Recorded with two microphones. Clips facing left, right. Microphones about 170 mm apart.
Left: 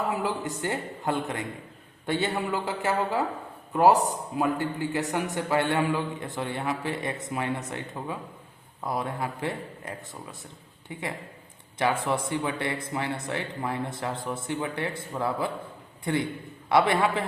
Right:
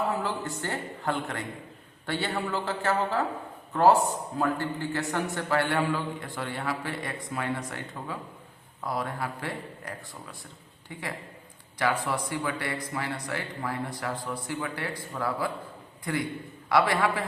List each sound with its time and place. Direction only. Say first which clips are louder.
0.1 s a man's voice: left 2 dB; 15° left (ahead or behind)
11.8 s speech: left 2 dB; 25° left (ahead or behind)